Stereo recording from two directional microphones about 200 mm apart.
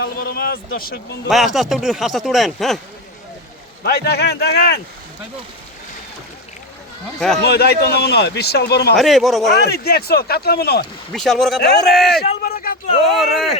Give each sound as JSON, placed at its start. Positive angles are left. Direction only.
{"t": 0.0, "sound": "speech", "side_deg": 50}
{"t": 1.3, "sound": "speech", "side_deg": 0}
{"t": 3.8, "sound": "speech", "side_deg": 55}
{"t": 7.4, "sound": "a man's voice", "side_deg": 55}
{"t": 9.0, "sound": "speech", "side_deg": 0}
{"t": 9.6, "sound": "speech", "side_deg": 55}
{"t": 11.1, "sound": "speech", "side_deg": 0}
{"t": 12.4, "sound": "a sound", "side_deg": 45}
{"t": 13.1, "sound": "speech", "side_deg": 0}